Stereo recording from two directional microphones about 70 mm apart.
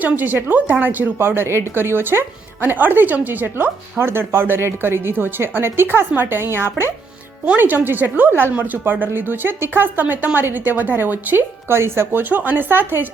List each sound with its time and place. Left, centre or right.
0.0 s speech: right
7.9 s a woman's voice: right